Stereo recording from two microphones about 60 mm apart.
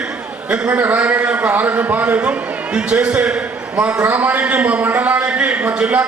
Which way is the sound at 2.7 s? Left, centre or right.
Centre.